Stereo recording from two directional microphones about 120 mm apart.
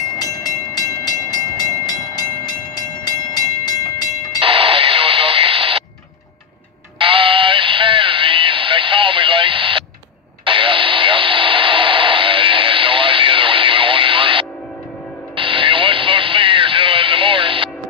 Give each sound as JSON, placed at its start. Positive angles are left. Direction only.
{"t": 0.1, "sound": "train", "side_deg": 30}
{"t": 4.4, "sound": "radio", "side_deg": -50}
{"t": 7.0, "sound": "radio", "side_deg": -45}
{"t": 15.3, "sound": "vehicle", "side_deg": -45}